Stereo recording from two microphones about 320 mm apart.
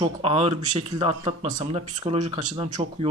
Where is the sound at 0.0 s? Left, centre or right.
Centre.